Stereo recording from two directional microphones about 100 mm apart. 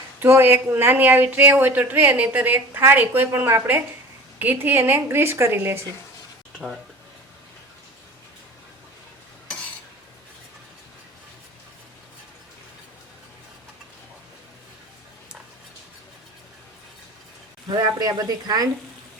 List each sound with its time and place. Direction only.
0.2 s speech: 25° right (ahead or behind)
17.7 s speech: 40° right (ahead or behind)